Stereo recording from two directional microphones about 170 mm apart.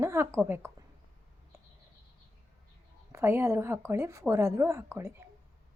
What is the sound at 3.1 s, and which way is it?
Speech, 15° right (ahead or behind).